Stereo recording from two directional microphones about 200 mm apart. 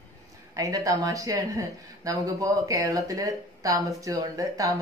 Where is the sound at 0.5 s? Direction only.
15° right (ahead or behind).